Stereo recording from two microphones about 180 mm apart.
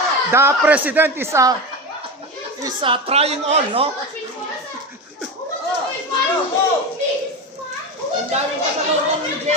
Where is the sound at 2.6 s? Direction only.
30° right (ahead or behind).